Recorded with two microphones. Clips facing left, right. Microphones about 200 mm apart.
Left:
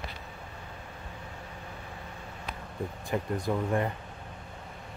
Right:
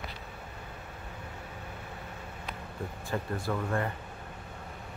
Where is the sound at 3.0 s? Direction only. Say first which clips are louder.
Left 3 dB; 20° left (ahead or behind).